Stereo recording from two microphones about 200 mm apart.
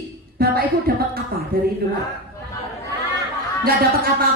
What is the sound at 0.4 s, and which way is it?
Speech, 50° right (ahead or behind).